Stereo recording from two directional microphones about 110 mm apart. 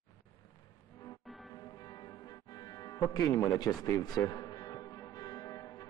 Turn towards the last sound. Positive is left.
turn(degrees=35)  # may be behind; listen again after turning